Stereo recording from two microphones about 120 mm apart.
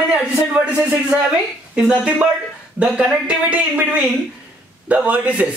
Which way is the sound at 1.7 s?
5° right (ahead or behind).